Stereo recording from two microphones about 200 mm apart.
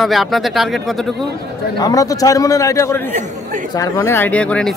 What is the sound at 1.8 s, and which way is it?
A man's voice, 20° left (ahead or behind).